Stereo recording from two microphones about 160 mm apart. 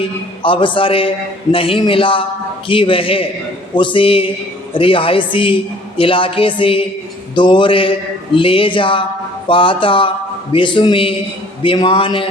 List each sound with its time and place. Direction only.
0.4 s a man's voice: 30° left (ahead or behind)